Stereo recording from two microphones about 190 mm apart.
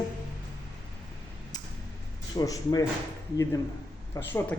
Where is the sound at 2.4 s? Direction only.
20° left (ahead or behind).